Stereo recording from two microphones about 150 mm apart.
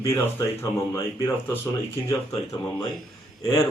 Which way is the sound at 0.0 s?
20° left (ahead or behind).